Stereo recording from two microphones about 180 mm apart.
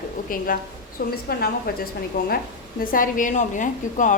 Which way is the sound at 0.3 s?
50° left (ahead or behind).